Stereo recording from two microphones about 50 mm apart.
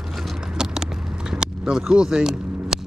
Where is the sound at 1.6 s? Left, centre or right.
Centre.